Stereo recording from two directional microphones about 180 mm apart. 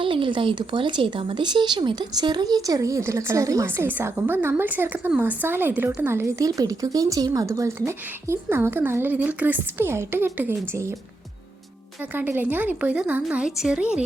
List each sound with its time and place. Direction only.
0.0 s speech: 30° right (ahead or behind)
12.1 s speech: 10° right (ahead or behind)